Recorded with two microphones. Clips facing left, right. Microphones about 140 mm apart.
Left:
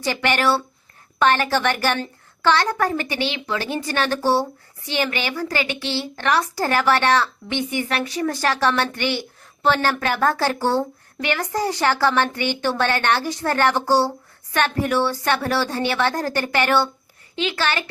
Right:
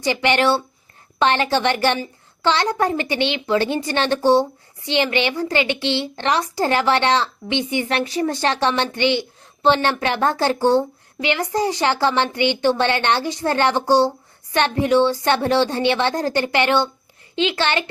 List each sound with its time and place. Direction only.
0.0 s a woman's voice: 20° right (ahead or behind)